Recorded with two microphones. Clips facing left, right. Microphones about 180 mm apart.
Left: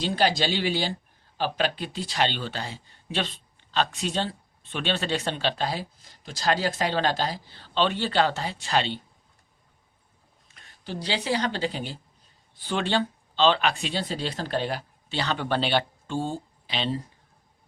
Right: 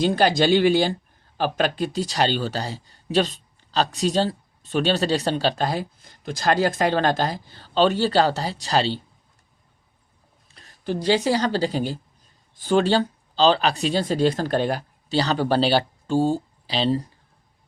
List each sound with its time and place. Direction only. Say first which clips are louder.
0.0 s speech: right 6 dB; 50° right (ahead or behind)
10.5 s a woman's voice: right 8 dB; 40° right (ahead or behind)